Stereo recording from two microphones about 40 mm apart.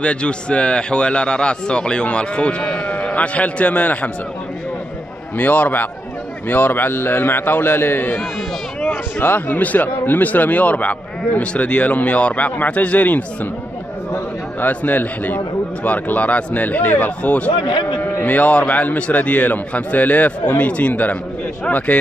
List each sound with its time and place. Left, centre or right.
0.0 s a man's voice: left
2.9 s a man's voice: left
5.4 s a man's voice: left
8.8 s a sound: left
9.6 s a man's voice: left
14.6 s a man's voice: left
18.9 s a man's voice: left